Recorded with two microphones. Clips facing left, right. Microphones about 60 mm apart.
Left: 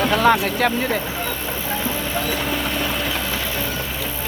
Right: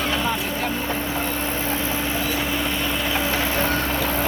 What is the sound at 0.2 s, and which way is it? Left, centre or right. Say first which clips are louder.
Speech: left 8 dB; left.